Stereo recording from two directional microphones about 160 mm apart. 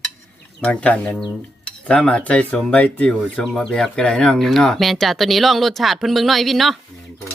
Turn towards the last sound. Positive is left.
turn(degrees=0)  # may be behind; listen again after turning